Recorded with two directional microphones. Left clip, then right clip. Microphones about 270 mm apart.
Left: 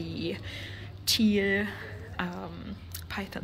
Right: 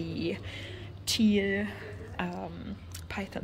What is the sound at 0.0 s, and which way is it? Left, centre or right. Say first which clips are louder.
Speech: right 1 dB; centre.